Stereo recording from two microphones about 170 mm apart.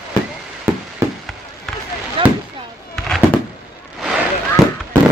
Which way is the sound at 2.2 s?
30° right (ahead or behind).